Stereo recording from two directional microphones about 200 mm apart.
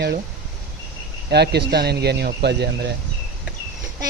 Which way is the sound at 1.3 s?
55° right (ahead or behind).